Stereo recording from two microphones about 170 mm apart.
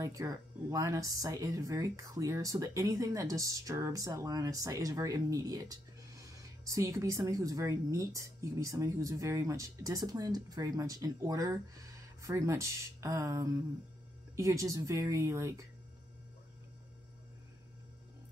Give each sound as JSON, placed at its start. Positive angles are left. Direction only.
{"t": 0.0, "sound": "speech", "side_deg": -20}